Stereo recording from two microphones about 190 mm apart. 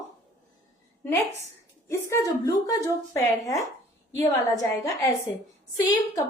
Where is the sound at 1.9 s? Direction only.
15° left (ahead or behind).